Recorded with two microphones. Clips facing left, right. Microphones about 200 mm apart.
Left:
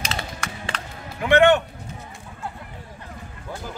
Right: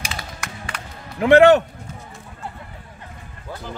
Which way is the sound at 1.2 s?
35° right (ahead or behind).